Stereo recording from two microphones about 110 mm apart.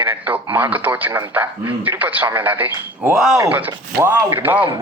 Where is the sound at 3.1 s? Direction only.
Centre (ahead or behind).